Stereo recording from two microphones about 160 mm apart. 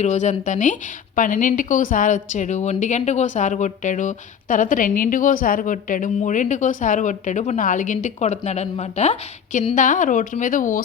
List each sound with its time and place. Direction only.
0.0 s speech: 50° left (ahead or behind)